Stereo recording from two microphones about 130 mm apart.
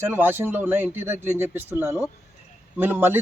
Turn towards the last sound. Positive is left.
turn(degrees=-15)  # may be behind; listen again after turning